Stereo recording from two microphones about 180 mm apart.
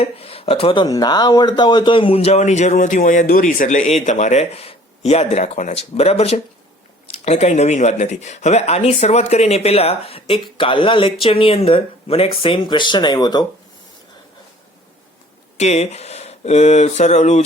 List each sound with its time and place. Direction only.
0.0 s speech: 30° left (ahead or behind)
15.5 s speech: 40° left (ahead or behind)